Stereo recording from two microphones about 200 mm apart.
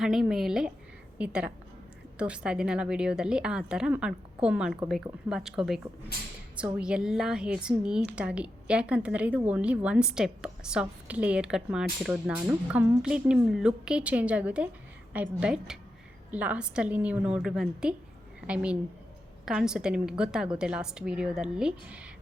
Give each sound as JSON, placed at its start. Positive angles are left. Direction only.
{"t": 0.0, "sound": "a woman's voice", "side_deg": 0}